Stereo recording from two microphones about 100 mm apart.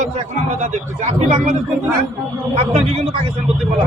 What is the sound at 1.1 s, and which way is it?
Speech, 90° right.